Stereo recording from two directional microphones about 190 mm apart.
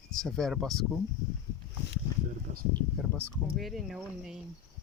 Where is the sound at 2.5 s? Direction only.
40° right (ahead or behind).